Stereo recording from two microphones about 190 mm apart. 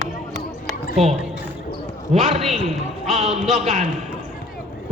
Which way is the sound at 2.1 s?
35° right (ahead or behind).